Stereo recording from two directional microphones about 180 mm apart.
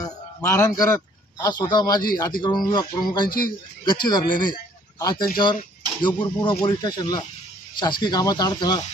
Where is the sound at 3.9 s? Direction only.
25° left (ahead or behind).